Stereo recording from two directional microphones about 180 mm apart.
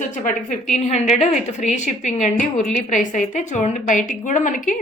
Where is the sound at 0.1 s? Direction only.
45° left (ahead or behind).